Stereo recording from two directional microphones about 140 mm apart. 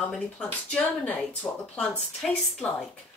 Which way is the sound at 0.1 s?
10° left (ahead or behind).